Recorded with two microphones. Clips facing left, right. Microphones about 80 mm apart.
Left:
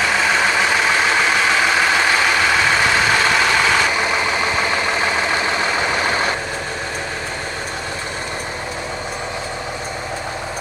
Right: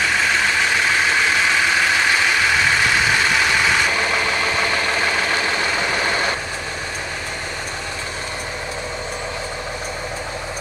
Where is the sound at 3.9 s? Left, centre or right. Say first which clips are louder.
Left 1 dB; centre.